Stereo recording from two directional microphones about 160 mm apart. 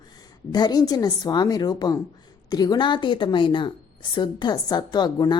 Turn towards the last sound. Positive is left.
turn(degrees=25)  # may be behind; listen again after turning